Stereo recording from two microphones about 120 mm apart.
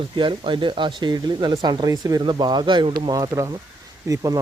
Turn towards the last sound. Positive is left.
turn(degrees=-30)  # may be behind; listen again after turning